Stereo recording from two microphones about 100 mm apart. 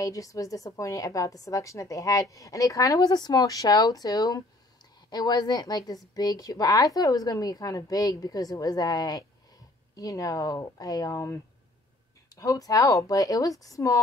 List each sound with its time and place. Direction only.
0.0 s a woman's voice: 35° left (ahead or behind)